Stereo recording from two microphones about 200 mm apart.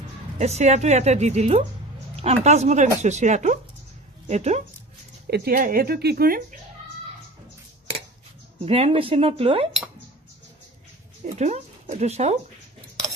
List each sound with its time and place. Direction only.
0.4 s speech: 35° right (ahead or behind)
5.2 s speech: 50° right (ahead or behind)
8.6 s a woman's voice: 30° right (ahead or behind)
11.2 s speech: 35° right (ahead or behind)